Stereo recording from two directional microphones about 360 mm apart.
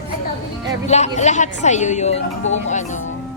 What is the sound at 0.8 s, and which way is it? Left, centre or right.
A woman's voice, centre.